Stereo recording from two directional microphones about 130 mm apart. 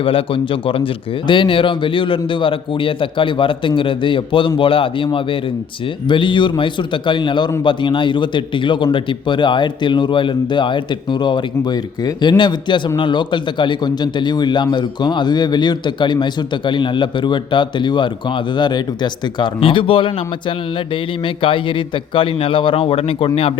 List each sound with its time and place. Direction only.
0.0 s a man's voice: 45° left (ahead or behind)